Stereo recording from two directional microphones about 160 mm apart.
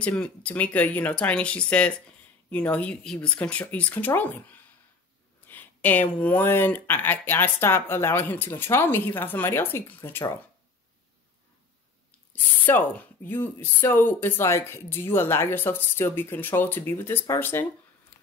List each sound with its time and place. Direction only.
0.0 s speech: 5° left (ahead or behind)
5.5 s speech: 10° left (ahead or behind)
12.3 s speech: 10° left (ahead or behind)